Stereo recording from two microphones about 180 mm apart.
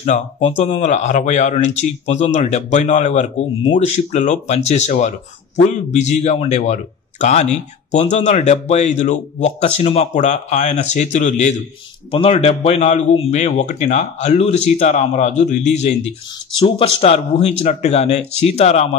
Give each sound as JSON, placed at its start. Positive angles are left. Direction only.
{"t": 0.0, "sound": "a man's voice", "side_deg": 40}